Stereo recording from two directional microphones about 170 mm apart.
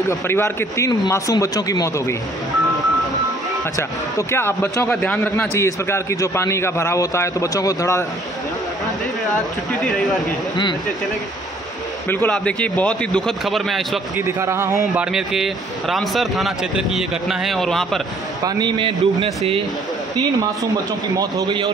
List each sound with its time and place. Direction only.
0.1 s a man's voice: 15° left (ahead or behind)
4.3 s a man's voice: 15° left (ahead or behind)
9.8 s speech: centre (ahead or behind)
10.5 s speech: 25° left (ahead or behind)
12.1 s a man's voice: 10° left (ahead or behind)
14.1 s a man's voice: 15° right (ahead or behind)
15.1 s speech: centre (ahead or behind)
18.4 s a man's voice: 25° right (ahead or behind)
21.2 s a man's voice: 25° right (ahead or behind)